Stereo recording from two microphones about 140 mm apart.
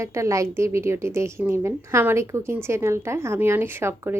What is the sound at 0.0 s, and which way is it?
A woman's voice, 20° right (ahead or behind).